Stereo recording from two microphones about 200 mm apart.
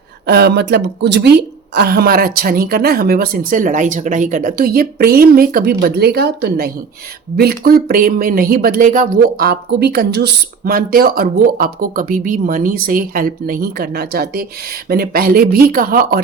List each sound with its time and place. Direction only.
0.3 s speech: 55° right (ahead or behind)